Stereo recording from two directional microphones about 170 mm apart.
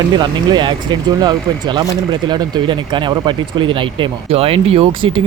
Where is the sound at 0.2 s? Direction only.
25° right (ahead or behind).